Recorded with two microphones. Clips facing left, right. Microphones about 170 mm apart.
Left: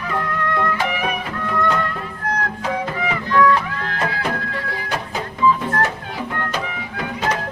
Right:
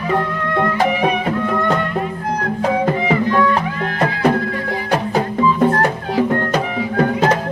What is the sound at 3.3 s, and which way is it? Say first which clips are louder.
Music: left 5 dB; 25° right (ahead or behind).